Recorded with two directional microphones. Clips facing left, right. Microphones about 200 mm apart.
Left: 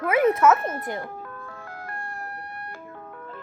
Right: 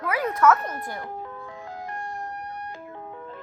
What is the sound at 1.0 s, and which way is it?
Music, 20° right (ahead or behind).